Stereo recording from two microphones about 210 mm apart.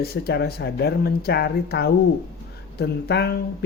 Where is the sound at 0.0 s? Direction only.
50° left (ahead or behind).